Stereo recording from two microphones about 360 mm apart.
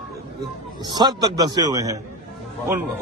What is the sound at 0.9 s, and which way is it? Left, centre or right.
Speech, centre.